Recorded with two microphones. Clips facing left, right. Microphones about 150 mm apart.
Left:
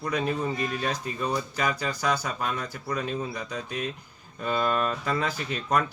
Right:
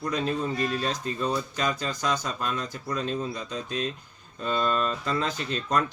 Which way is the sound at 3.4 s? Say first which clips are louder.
Right 1 dB; 60° left (ahead or behind).